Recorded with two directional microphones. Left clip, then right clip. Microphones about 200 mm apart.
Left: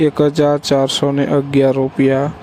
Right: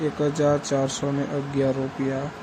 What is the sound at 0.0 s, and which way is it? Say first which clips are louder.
Speech: left 10 dB; 40° left (ahead or behind).